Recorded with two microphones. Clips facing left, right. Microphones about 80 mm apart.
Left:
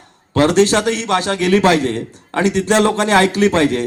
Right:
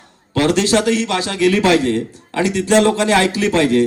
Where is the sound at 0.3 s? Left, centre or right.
Left.